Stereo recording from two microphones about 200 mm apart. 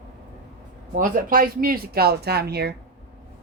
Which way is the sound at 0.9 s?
40° right (ahead or behind).